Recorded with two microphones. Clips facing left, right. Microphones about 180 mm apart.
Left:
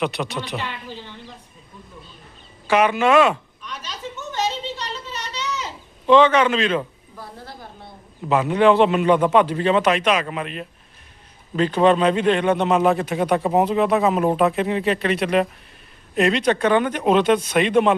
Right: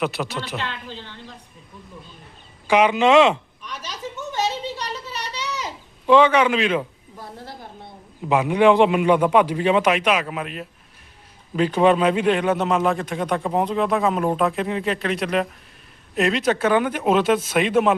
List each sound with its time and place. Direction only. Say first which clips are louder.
0.0 s a man's voice: left 1 dB; 5° right (ahead or behind)
0.5 s speech: left 1 dB; 10° left (ahead or behind)
2.6 s a man's voice: right 1 dB; 15° right (ahead or behind)
3.7 s a sound: even; 10° right (ahead or behind)
8.3 s a man's voice: even; 10° right (ahead or behind)